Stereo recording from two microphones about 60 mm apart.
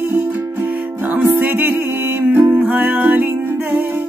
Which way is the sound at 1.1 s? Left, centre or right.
Right.